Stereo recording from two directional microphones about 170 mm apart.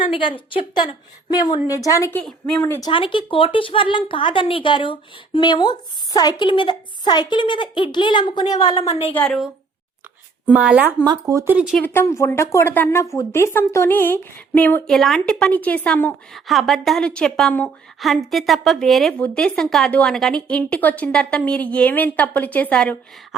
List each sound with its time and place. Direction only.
0.0 s a woman's voice: 30° left (ahead or behind); by 2.8 s 10° left (ahead or behind)
2.8 s a woman's voice: 30° left (ahead or behind)
9.1 s a woman's voice: 5° left (ahead or behind)
10.4 s speech: 10° right (ahead or behind)
11.0 s speech: 20° right (ahead or behind)
11.5 s a woman's voice: 5° right (ahead or behind)
11.8 s a woman's voice: 15° left (ahead or behind)